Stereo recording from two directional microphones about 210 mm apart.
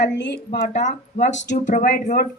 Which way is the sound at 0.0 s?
55° left (ahead or behind).